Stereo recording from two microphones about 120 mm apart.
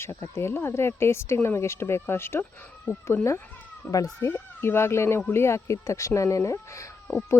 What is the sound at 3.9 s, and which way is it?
Speech, 30° left (ahead or behind).